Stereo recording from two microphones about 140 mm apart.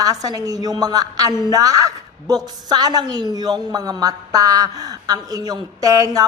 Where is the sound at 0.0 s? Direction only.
25° right (ahead or behind).